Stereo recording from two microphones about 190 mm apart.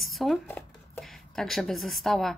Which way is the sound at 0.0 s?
Centre (ahead or behind).